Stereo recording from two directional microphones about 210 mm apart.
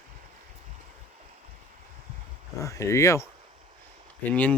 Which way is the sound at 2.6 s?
15° left (ahead or behind).